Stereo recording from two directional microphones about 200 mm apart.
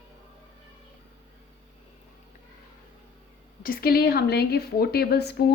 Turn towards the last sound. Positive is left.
turn(degrees=55)  # may be behind; listen again after turning